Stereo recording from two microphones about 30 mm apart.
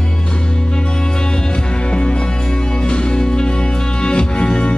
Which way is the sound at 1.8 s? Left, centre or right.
Left.